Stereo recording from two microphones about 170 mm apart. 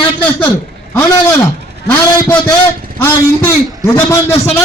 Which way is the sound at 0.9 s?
20° left (ahead or behind).